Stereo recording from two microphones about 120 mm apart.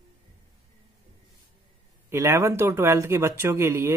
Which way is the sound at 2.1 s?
25° right (ahead or behind).